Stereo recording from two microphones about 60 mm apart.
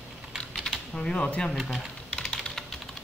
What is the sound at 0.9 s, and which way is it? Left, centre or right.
Speech, centre.